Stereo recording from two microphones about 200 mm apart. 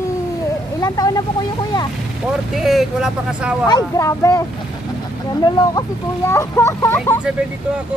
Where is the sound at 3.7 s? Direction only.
15° left (ahead or behind).